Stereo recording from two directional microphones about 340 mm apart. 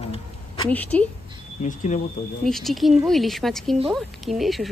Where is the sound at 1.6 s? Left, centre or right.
Left.